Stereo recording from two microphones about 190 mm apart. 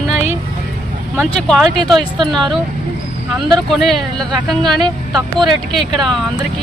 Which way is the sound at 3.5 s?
Centre (ahead or behind).